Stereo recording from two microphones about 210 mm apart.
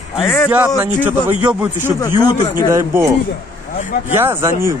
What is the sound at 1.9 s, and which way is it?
Speech, 20° left (ahead or behind).